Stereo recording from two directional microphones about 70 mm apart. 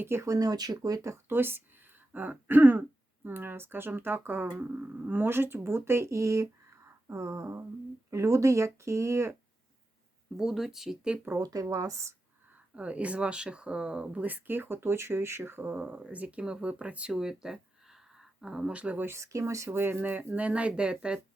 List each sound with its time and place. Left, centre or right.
0.0 s speech: right
0.3 s speech: right
1.3 s speech: right
10.3 s speech: centre
11.3 s speech: right
12.7 s speech: centre
15.8 s speech: centre
19.0 s speech: right; by 21.2 s centre